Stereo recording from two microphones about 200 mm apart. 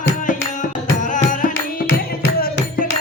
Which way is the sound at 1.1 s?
40° left (ahead or behind).